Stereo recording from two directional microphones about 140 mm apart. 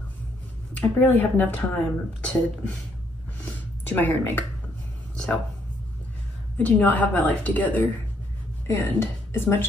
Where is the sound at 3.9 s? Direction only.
15° left (ahead or behind).